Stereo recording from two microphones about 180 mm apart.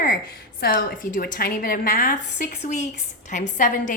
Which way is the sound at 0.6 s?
55° left (ahead or behind).